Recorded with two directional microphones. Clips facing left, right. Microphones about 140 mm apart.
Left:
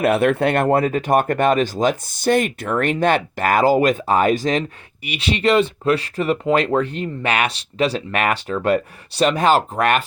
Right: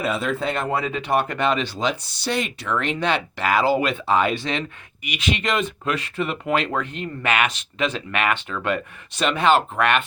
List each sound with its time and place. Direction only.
0.0 s speech: 65° left (ahead or behind); by 10.1 s 40° left (ahead or behind)